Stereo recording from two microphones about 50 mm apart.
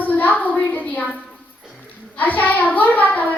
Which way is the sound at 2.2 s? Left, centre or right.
Left.